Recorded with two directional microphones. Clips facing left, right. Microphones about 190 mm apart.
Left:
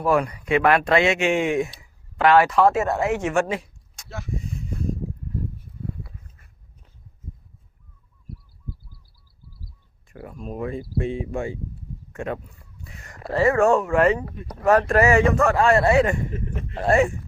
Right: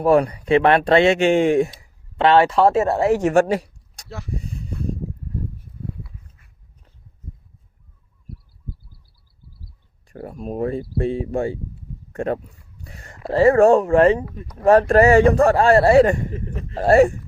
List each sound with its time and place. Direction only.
0.0 s speech: 35° right (ahead or behind)
3.5 s a sound: 40° right (ahead or behind)
10.1 s speech: 40° right (ahead or behind)